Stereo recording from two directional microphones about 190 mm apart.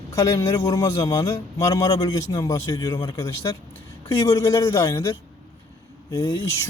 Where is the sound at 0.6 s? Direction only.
15° left (ahead or behind).